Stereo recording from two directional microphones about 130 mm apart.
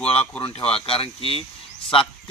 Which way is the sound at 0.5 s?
45° left (ahead or behind).